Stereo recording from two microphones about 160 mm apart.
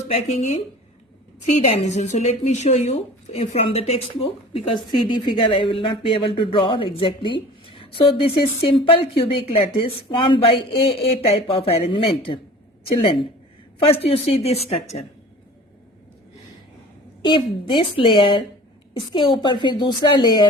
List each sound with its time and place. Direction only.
0.1 s a woman's voice: 40° left (ahead or behind)
17.2 s a woman's voice: 30° left (ahead or behind)